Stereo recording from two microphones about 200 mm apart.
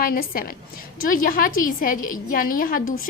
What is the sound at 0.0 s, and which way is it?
A woman's voice, 45° left (ahead or behind).